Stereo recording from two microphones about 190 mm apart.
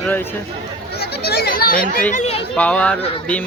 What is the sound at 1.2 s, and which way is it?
Children playing, 55° left (ahead or behind).